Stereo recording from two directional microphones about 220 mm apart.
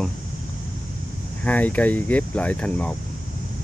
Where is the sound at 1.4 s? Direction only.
5° left (ahead or behind).